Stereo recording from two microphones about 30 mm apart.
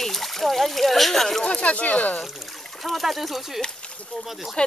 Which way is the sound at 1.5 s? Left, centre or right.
Left.